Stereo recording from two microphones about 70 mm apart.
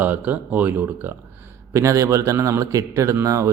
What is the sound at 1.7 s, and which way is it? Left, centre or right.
A man's voice, right.